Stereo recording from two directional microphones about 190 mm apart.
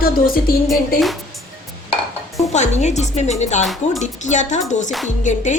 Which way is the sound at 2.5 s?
35° left (ahead or behind).